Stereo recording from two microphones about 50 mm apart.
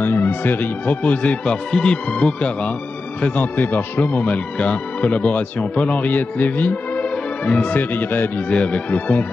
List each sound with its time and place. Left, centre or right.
0.0 s speech: left
8.5 s speech: left